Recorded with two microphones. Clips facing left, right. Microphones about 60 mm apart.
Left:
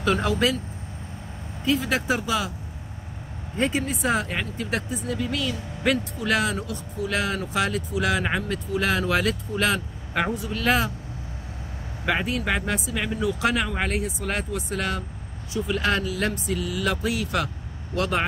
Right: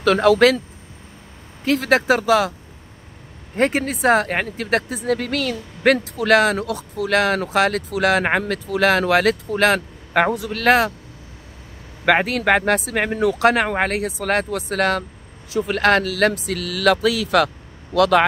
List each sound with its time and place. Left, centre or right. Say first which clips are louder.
0.0 s speech: right 9 dB; right
1.6 s speech: right 6 dB; right
3.5 s speech: right 6 dB; right
12.0 s speech: right 8 dB; right
17.9 s speech: right 10 dB; right